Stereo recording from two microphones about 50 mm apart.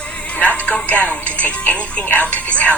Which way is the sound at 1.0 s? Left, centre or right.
Left.